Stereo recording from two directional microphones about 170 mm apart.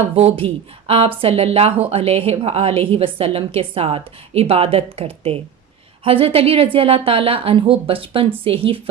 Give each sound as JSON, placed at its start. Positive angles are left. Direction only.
{"t": 0.0, "sound": "speech", "side_deg": -35}